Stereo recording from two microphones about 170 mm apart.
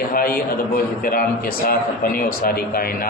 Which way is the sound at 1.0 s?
60° left (ahead or behind).